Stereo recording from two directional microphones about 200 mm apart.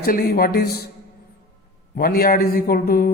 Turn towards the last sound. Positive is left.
turn(degrees=50)  # may be behind; listen again after turning